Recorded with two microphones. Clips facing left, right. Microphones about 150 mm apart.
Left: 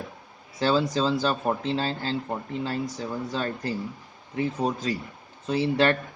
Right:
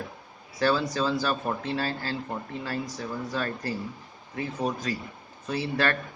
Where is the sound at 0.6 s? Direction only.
25° left (ahead or behind).